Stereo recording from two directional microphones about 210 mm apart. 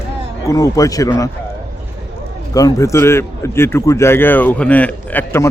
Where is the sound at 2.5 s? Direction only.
15° left (ahead or behind).